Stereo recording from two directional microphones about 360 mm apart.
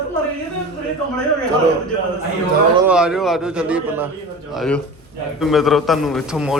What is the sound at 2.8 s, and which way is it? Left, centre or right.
A man's voice, centre.